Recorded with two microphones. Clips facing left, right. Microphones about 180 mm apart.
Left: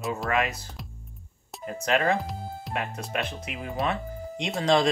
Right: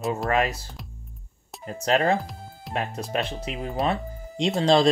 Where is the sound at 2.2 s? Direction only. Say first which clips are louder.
Left 4 dB; centre (ahead or behind).